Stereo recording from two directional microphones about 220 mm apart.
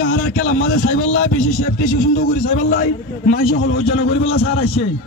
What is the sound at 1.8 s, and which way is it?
A man's voice, 35° left (ahead or behind).